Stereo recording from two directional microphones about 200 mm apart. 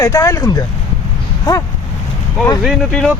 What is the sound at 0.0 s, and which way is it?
Speech, 15° left (ahead or behind).